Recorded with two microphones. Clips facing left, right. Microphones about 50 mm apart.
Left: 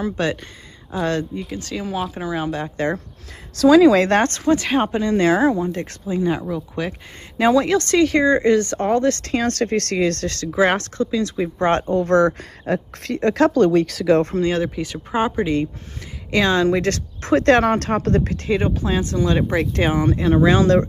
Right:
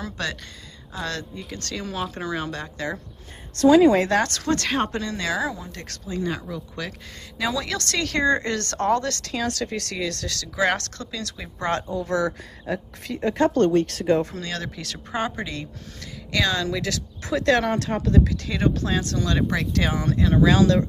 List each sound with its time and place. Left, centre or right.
0.0 s speech: left
1.4 s speech: centre
4.1 s speech: left
4.5 s speech: centre
5.1 s speech: left
7.3 s speech: left; by 9.0 s centre
9.0 s a woman's voice: left
10.5 s speech: left
11.9 s speech: left
14.2 s a woman's voice: left
18.7 s speech: centre; by 20.8 s left